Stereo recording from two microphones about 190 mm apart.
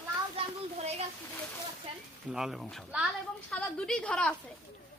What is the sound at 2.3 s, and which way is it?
A woman's voice, centre (ahead or behind).